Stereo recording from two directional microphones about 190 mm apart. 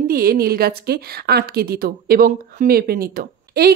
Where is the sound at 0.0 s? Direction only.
50° right (ahead or behind).